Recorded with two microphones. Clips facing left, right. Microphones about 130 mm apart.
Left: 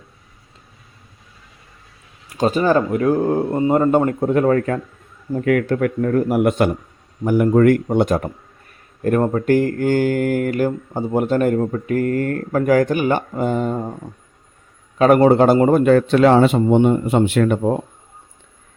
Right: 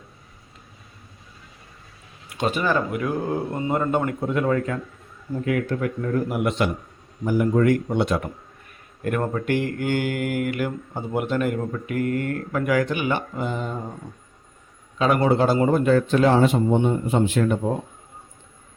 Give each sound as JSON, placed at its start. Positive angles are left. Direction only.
{"t": 2.3, "sound": "a man's voice", "side_deg": 40}
{"t": 6.3, "sound": "speech", "side_deg": 50}
{"t": 7.3, "sound": "speech", "side_deg": 60}
{"t": 14.9, "sound": "a man's voice", "side_deg": 50}